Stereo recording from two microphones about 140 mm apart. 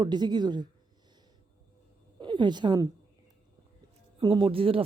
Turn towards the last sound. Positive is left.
turn(degrees=-40)  # may be behind; listen again after turning